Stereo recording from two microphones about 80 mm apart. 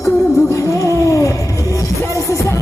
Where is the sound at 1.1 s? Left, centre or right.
Left.